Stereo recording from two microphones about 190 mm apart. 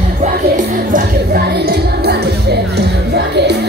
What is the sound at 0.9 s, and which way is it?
Music, 60° right (ahead or behind).